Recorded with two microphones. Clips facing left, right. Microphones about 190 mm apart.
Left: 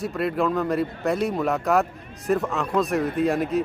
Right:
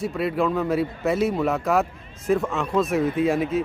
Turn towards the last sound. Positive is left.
turn(degrees=0)  # may be behind; listen again after turning